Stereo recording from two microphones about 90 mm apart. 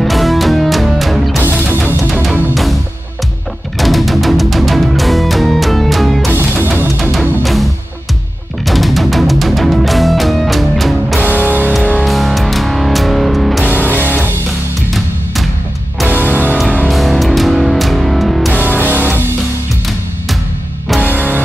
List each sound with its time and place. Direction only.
0.0 s music: centre (ahead or behind)
2.5 s music: centre (ahead or behind)
6.3 s music: 25° right (ahead or behind)
7.0 s music: centre (ahead or behind)
8.6 s music: centre (ahead or behind)
11.1 s music: 20° left (ahead or behind)
11.4 s music: 15° right (ahead or behind)
12.0 s music: centre (ahead or behind)
13.7 s music: 20° right (ahead or behind)
16.2 s music: 15° left (ahead or behind)
16.8 s music: centre (ahead or behind)
18.9 s music: 20° right (ahead or behind)